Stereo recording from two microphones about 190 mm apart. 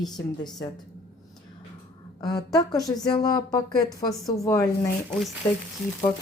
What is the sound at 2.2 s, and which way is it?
A woman's voice, 20° left (ahead or behind).